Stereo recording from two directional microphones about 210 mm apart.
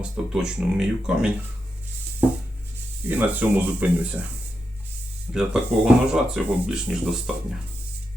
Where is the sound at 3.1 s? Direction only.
10° right (ahead or behind).